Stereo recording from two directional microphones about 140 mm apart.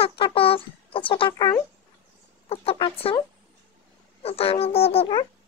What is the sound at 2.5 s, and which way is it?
Speech, 45° left (ahead or behind).